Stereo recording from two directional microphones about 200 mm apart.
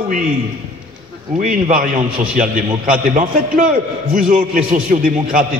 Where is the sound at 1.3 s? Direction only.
40° right (ahead or behind).